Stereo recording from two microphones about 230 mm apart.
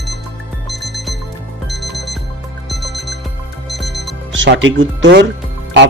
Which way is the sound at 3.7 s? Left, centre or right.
Centre.